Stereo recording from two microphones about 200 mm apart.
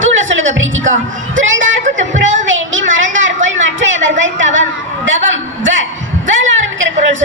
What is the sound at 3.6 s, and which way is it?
A woman's voice, 70° right (ahead or behind).